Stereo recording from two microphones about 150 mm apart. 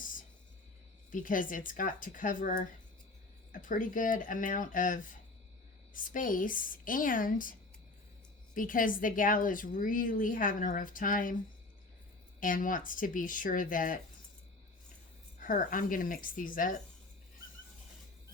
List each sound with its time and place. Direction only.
1.1 s a woman's voice: 65° left (ahead or behind)
8.5 s a woman's voice: 65° left (ahead or behind)
12.4 s a woman's voice: 65° left (ahead or behind)
15.4 s a woman's voice: 60° left (ahead or behind)